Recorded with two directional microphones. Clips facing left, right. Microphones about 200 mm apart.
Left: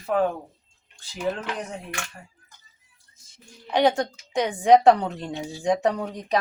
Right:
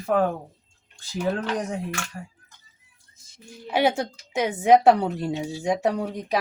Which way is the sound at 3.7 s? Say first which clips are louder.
Left 1 dB; 5° right (ahead or behind).